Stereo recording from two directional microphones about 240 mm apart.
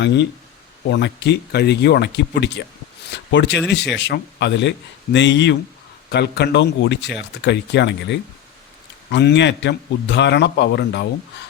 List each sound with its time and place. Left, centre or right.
0.0 s a man's voice: left